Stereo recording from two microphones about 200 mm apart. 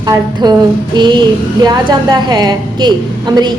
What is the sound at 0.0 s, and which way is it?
A woman's voice, 20° right (ahead or behind).